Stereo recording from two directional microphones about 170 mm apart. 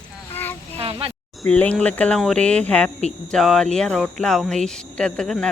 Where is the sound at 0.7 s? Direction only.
35° right (ahead or behind).